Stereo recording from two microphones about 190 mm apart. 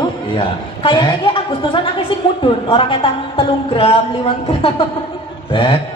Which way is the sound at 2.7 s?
25° left (ahead or behind).